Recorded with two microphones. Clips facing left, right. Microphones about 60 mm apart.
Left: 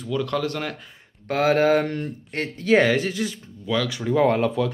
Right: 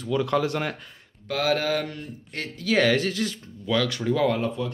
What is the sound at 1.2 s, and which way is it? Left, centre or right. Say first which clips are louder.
Speech: left 5 dB; left.